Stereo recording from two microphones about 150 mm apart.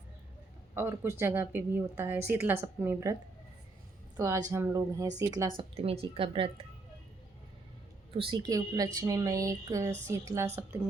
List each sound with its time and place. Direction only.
0.7 s a woman's voice: 15° right (ahead or behind)
4.2 s a woman's voice: 20° right (ahead or behind)
5.5 s a woman's voice: 40° right (ahead or behind)
8.1 s a woman's voice: 35° right (ahead or behind)
8.4 s a woman's voice: 25° right (ahead or behind)